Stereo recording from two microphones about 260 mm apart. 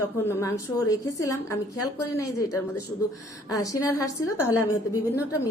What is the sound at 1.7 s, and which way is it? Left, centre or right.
Speech, left.